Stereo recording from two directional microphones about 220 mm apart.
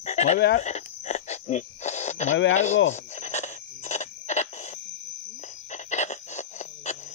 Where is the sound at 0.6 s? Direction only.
30° left (ahead or behind).